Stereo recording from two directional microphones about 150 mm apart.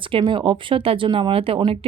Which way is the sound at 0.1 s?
35° right (ahead or behind).